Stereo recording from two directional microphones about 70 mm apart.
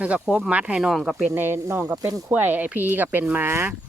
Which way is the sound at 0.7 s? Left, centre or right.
Centre.